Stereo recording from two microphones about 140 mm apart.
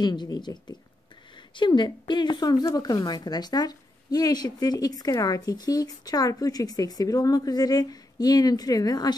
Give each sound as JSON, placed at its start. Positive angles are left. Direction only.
{"t": 0.0, "sound": "speech", "side_deg": 30}